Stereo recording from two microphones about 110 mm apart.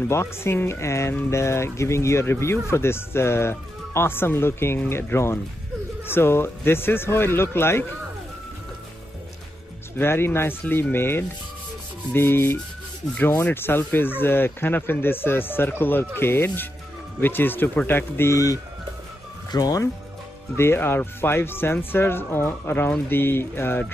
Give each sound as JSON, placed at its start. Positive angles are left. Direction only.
{"t": 0.1, "sound": "speech", "side_deg": 25}
{"t": 9.9, "sound": "speech", "side_deg": 20}
{"t": 20.5, "sound": "speech", "side_deg": 20}